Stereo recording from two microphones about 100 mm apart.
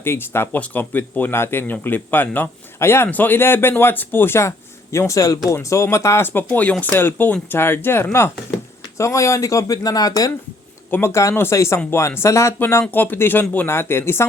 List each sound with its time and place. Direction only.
0.0 s speech: 25° left (ahead or behind); by 10.3 s 40° left (ahead or behind)
10.9 s speech: 25° left (ahead or behind)